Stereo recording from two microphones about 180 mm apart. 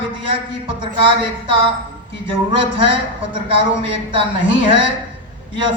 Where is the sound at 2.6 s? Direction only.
30° right (ahead or behind).